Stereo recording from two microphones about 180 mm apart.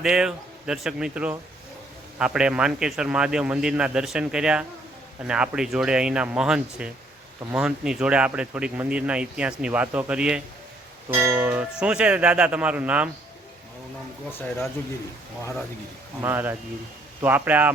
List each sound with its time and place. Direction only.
0.0 s speech: 5° right (ahead or behind)
14.3 s speech: 10° left (ahead or behind)
16.2 s speech: 10° right (ahead or behind)